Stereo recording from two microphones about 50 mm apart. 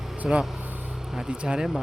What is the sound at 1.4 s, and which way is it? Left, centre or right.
Speech, centre.